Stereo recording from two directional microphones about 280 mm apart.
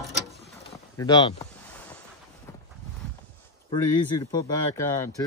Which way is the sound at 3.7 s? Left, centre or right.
Centre.